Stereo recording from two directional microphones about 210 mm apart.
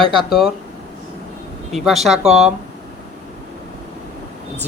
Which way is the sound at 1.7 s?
Centre (ahead or behind).